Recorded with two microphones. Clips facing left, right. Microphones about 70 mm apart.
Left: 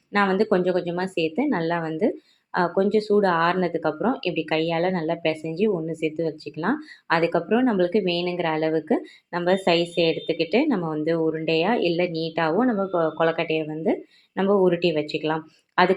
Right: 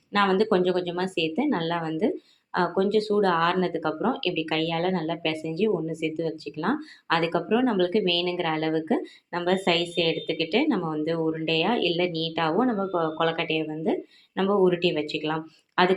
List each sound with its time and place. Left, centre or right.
0.1 s a woman's voice: left